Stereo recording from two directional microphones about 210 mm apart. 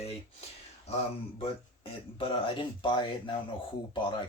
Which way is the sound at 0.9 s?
30° left (ahead or behind).